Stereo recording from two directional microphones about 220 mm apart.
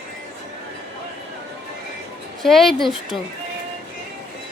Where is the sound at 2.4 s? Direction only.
Centre (ahead or behind).